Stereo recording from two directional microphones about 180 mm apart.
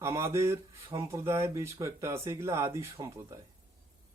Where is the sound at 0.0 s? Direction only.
15° right (ahead or behind).